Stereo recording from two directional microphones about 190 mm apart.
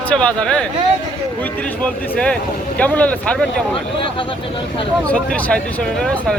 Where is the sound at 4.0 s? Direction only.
25° left (ahead or behind).